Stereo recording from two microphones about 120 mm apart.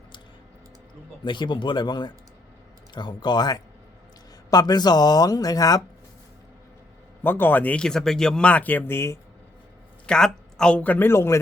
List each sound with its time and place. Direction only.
1.2 s speech: 40° left (ahead or behind)
7.2 s speech: 15° left (ahead or behind)
10.1 s speech: 5° left (ahead or behind); by 11.3 s 20° left (ahead or behind)